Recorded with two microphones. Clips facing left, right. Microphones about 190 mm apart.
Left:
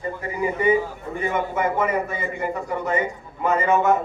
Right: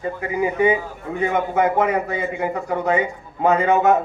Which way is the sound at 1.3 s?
70° right (ahead or behind).